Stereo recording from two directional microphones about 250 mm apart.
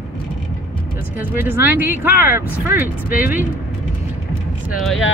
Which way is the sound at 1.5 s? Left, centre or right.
Centre.